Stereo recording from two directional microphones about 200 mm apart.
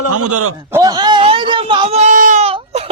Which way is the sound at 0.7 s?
20° right (ahead or behind).